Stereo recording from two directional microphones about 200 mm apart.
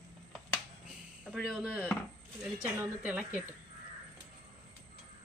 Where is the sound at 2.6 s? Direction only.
10° right (ahead or behind).